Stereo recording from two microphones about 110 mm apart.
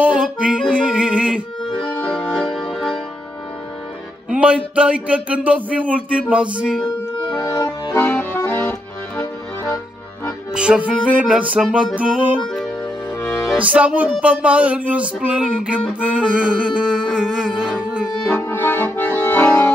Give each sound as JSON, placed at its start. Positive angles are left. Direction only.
{"t": 0.0, "sound": "music", "side_deg": -10}
{"t": 1.7, "sound": "music", "side_deg": 5}
{"t": 4.3, "sound": "music", "side_deg": -10}
{"t": 4.7, "sound": "a sound", "side_deg": -10}
{"t": 7.4, "sound": "accordion", "side_deg": 35}
{"t": 8.0, "sound": "accordion", "side_deg": 20}
{"t": 10.5, "sound": "a sound", "side_deg": -10}
{"t": 12.4, "sound": "music", "side_deg": 0}
{"t": 13.2, "sound": "music", "side_deg": 25}
{"t": 13.6, "sound": "a sound", "side_deg": -10}
{"t": 18.3, "sound": "accordion", "side_deg": 20}